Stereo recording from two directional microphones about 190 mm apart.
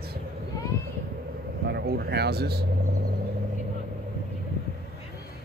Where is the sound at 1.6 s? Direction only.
60° right (ahead or behind).